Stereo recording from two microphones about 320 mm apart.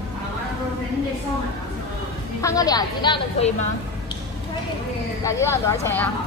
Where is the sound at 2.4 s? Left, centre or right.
Centre.